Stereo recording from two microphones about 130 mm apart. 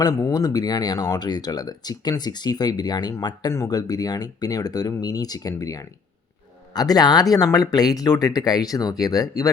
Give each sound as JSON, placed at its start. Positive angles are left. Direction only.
{"t": 0.0, "sound": "speech", "side_deg": 30}